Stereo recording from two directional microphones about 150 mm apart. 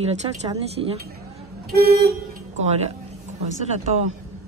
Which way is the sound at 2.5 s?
50° right (ahead or behind).